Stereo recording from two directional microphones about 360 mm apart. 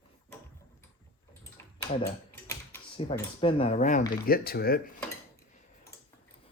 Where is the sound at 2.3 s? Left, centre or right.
Centre.